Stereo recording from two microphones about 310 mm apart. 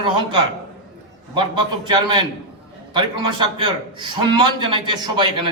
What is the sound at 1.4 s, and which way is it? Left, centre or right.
Speech, centre.